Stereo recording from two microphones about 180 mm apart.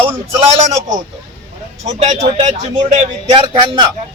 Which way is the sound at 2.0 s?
40° right (ahead or behind).